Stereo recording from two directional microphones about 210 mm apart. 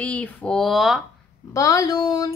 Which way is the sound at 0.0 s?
5° left (ahead or behind).